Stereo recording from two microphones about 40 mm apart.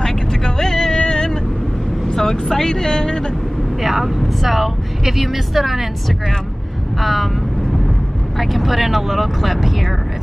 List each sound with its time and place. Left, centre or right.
0.0 s vehicle: centre
2.1 s speech: centre
3.8 s a woman's voice: centre
7.0 s a woman's voice: centre
8.4 s a woman's voice: centre